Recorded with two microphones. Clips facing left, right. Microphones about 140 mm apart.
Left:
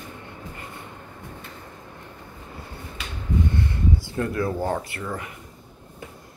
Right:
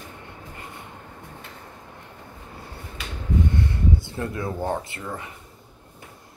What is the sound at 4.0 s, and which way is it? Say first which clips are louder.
Speech: left 4 dB; 20° right (ahead or behind).